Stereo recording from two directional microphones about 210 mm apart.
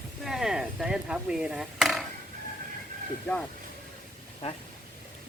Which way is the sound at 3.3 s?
5° left (ahead or behind).